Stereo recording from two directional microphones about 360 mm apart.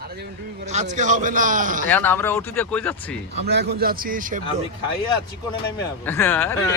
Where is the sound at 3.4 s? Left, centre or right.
Right.